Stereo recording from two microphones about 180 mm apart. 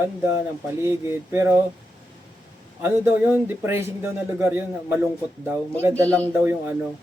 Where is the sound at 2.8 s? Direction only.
10° right (ahead or behind).